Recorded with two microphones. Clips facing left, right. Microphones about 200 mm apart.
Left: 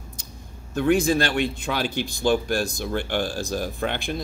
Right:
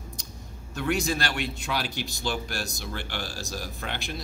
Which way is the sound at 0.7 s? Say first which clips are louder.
Left 8 dB; 50° left (ahead or behind).